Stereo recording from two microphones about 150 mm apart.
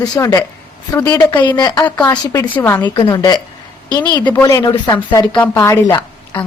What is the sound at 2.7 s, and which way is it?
A woman's voice, 30° left (ahead or behind).